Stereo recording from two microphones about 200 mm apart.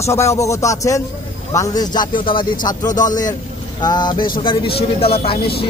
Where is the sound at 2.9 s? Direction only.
40° left (ahead or behind).